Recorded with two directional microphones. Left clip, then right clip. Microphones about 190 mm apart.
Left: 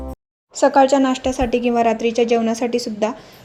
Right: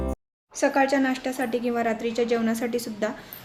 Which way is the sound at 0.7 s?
30° left (ahead or behind).